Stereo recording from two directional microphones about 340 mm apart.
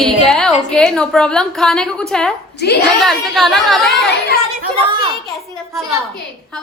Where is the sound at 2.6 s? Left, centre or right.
Left.